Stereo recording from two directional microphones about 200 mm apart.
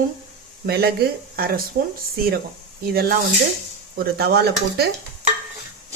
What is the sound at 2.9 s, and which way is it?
Speech, 50° right (ahead or behind).